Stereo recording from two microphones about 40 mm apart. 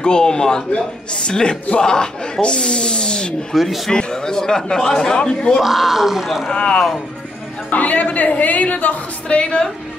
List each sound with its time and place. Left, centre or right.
0.0 s a man's voice: centre
3.5 s speech: centre
3.9 s a man's voice: centre
5.6 s speech: centre
6.5 s a man's voice: left
7.7 s a woman's voice: left
9.3 s a man's voice: left